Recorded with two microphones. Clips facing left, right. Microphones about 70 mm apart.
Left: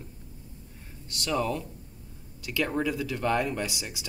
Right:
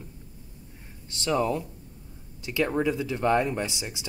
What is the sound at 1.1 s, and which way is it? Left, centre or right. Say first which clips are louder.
Speech: right 3 dB; right.